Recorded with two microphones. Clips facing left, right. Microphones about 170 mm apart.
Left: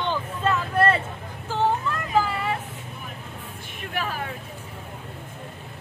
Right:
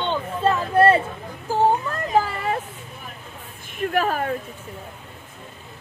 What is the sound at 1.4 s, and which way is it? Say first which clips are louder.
Vehicle: right 4 dB; 40° right (ahead or behind).